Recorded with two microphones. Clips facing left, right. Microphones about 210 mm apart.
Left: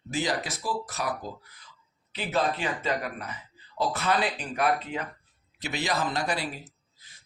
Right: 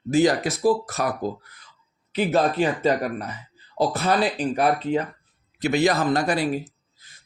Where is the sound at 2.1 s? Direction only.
45° right (ahead or behind).